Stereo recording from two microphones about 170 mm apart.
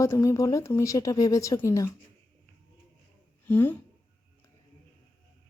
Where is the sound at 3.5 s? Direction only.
10° left (ahead or behind).